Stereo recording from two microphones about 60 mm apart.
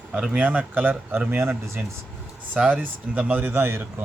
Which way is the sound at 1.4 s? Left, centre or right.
Right.